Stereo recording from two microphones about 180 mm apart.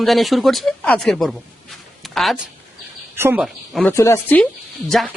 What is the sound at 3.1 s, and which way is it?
Speech, 15° right (ahead or behind).